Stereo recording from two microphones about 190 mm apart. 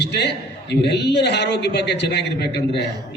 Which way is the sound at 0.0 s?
65° left (ahead or behind).